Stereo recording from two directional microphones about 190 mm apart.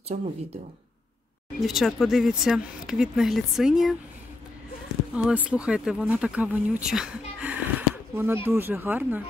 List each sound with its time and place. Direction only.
0.1 s speech: 40° right (ahead or behind)
1.6 s speech: centre (ahead or behind)
5.1 s speech: 5° right (ahead or behind)